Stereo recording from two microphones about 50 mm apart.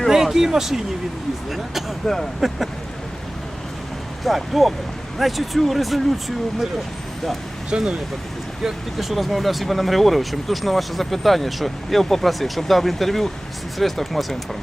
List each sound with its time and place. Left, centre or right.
0.1 s speech: centre
2.4 s speech: centre
4.2 s speech: centre
7.7 s speech: centre
8.6 s speech: centre